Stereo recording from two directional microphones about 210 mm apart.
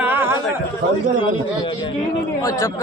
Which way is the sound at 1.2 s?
25° left (ahead or behind).